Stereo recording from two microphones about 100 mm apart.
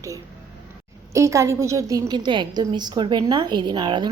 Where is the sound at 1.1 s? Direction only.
30° right (ahead or behind).